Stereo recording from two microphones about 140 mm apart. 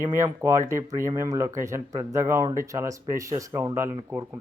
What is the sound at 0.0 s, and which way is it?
Speech, 20° right (ahead or behind).